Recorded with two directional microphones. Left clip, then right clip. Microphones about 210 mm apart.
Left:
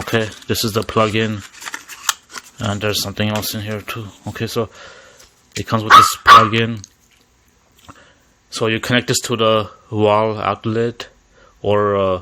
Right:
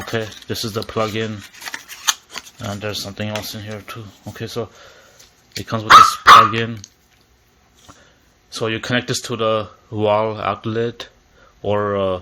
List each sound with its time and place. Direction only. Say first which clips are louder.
0.4 s speech: left 5 dB; 45° left (ahead or behind)
1.4 s shuffling cards: left 1 dB; 5° left (ahead or behind)
2.6 s speech: left 6 dB; 50° left (ahead or behind)
8.4 s speech: left 4 dB; 35° left (ahead or behind)